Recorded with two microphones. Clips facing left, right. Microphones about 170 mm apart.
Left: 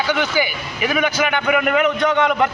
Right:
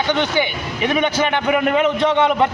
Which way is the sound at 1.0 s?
30° right (ahead or behind).